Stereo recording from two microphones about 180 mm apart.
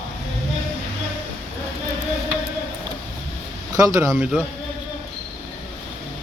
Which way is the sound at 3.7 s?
15° right (ahead or behind).